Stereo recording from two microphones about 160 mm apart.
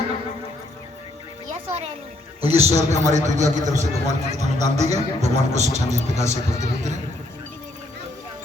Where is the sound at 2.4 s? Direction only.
40° right (ahead or behind).